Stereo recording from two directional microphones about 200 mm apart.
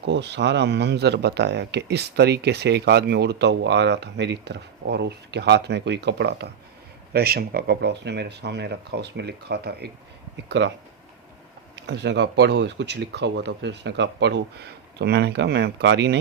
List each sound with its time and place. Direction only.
0.0 s speech: 60° right (ahead or behind)
11.9 s speech: 55° right (ahead or behind)